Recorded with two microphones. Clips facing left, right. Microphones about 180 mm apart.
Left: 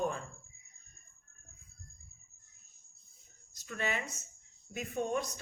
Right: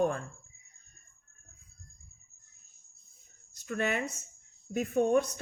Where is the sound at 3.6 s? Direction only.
50° right (ahead or behind).